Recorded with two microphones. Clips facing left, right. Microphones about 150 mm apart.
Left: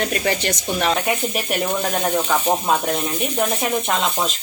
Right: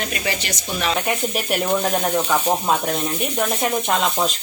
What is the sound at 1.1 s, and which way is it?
Sizzle, centre (ahead or behind).